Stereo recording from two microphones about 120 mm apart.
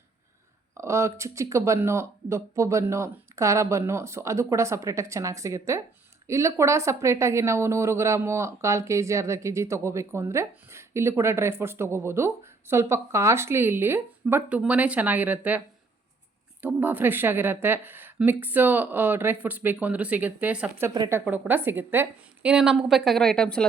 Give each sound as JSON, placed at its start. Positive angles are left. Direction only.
{"t": 0.7, "sound": "a woman's voice", "side_deg": -25}
{"t": 22.4, "sound": "speech", "side_deg": -5}